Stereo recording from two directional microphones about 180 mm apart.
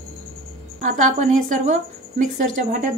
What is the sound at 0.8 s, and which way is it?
A woman's voice, 45° right (ahead or behind).